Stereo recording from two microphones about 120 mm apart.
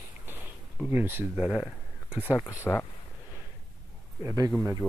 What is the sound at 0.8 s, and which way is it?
Speech, 15° right (ahead or behind).